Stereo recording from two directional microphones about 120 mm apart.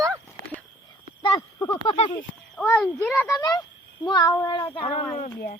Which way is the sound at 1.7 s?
45° left (ahead or behind).